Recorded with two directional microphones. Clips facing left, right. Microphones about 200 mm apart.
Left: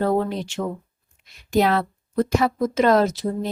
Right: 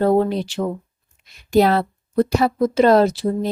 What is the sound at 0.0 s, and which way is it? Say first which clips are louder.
A woman's voice: right 5 dB; 35° right (ahead or behind).